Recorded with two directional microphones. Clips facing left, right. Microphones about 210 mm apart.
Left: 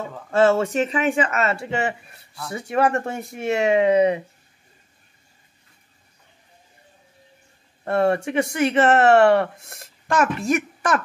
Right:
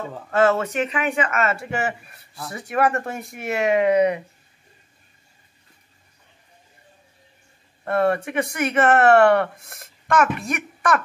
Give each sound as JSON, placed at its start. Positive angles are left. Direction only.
{"t": 0.3, "sound": "speech", "side_deg": 30}
{"t": 7.8, "sound": "speech", "side_deg": 25}